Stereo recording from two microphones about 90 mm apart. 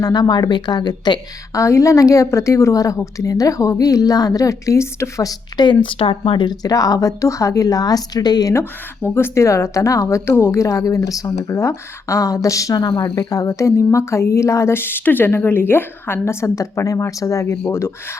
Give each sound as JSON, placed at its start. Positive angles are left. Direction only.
{"t": 0.0, "sound": "a woman's voice", "side_deg": 50}
{"t": 1.5, "sound": "a woman's voice", "side_deg": 35}
{"t": 9.0, "sound": "a woman's voice", "side_deg": 30}